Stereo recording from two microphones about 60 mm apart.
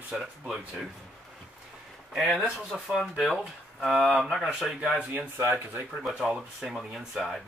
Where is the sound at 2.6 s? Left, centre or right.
Centre.